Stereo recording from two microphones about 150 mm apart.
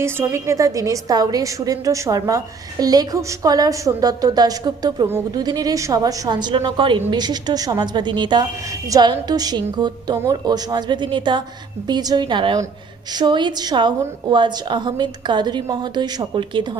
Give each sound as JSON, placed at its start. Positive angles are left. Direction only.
{"t": 0.0, "sound": "a woman's voice", "side_deg": -20}